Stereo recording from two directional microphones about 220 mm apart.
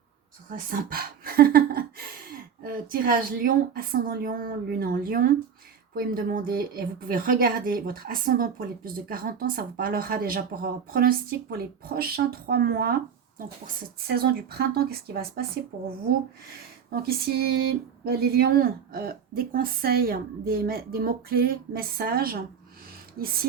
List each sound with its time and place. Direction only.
0.7 s a sound: 40° right (ahead or behind)
2.6 s a woman's voice: 40° right (ahead or behind)
14.1 s a woman's voice: 45° right (ahead or behind)
16.9 s a woman's voice: 45° right (ahead or behind)